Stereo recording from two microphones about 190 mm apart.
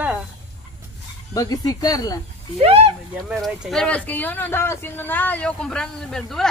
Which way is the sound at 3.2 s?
Centre (ahead or behind).